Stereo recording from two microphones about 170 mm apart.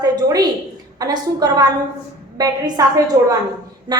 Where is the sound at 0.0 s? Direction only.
20° right (ahead or behind).